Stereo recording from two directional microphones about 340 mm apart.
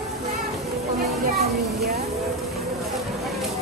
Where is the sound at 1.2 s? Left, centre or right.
Right.